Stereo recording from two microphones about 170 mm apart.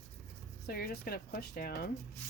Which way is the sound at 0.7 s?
60° left (ahead or behind).